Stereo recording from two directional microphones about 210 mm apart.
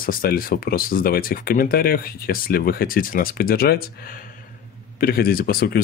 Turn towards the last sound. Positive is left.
turn(degrees=45)  # may be behind; listen again after turning